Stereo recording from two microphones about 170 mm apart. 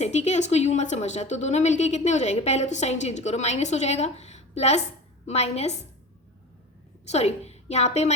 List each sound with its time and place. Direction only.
0.0 s speech: 40° left (ahead or behind)
7.0 s a woman's voice: 40° left (ahead or behind)